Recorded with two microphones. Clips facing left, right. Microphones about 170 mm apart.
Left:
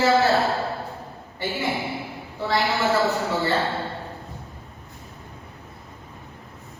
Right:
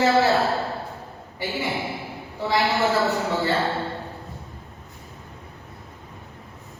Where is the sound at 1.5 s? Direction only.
Centre (ahead or behind).